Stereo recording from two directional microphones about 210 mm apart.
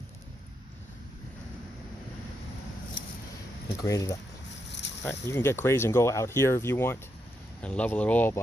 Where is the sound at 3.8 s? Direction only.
15° left (ahead or behind).